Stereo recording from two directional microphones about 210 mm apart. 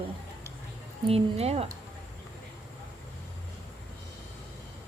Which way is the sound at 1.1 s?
30° right (ahead or behind).